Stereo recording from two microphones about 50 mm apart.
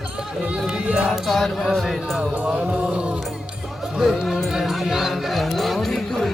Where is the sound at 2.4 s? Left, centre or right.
Right.